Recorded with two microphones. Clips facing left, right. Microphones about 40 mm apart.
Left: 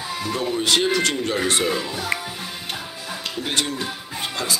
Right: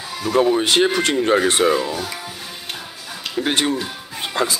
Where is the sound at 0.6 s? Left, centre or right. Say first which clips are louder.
Right 3 dB; right.